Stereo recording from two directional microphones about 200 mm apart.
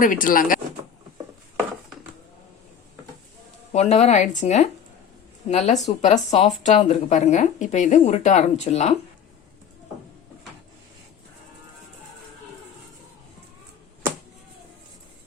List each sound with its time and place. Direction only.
0.0 s speech: 40° left (ahead or behind)
3.7 s speech: 35° left (ahead or behind)